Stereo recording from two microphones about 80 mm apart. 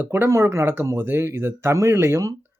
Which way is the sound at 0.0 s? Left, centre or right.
Right.